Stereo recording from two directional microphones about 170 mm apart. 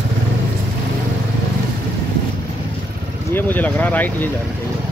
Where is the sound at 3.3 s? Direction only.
10° left (ahead or behind).